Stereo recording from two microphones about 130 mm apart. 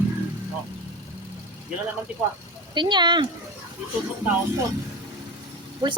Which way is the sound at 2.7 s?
35° right (ahead or behind).